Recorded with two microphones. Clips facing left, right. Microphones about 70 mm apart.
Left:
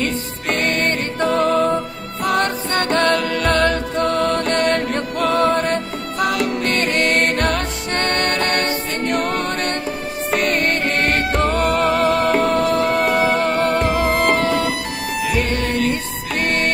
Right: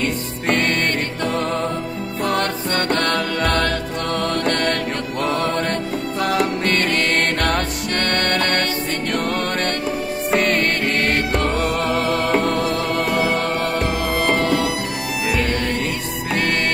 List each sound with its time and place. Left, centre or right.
1.2 s music: left
2.3 s music: left
6.3 s music: right
6.8 s music: left
11.4 s music: left